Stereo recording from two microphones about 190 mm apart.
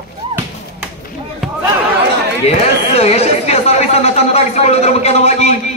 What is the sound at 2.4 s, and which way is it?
Speech, 35° left (ahead or behind).